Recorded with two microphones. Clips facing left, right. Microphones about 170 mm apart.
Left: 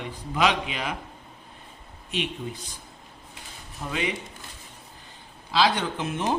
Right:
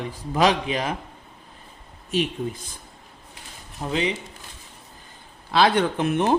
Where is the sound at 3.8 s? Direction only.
15° right (ahead or behind).